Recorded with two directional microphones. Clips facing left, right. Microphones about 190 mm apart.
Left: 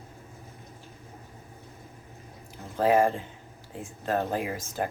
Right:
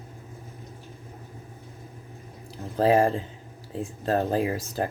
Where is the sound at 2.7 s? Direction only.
35° right (ahead or behind).